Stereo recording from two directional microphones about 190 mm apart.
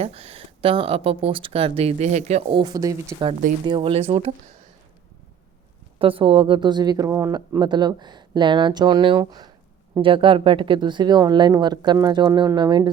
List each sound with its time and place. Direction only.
0.0 s speech: 30° right (ahead or behind)
6.0 s speech: 30° right (ahead or behind)